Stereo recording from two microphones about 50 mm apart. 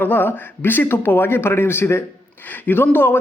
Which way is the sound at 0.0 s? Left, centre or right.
Left.